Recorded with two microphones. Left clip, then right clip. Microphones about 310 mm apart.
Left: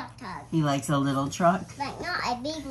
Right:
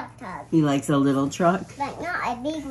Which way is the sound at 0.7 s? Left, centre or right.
Right.